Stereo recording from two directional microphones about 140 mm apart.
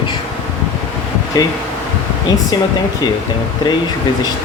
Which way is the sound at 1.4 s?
25° left (ahead or behind).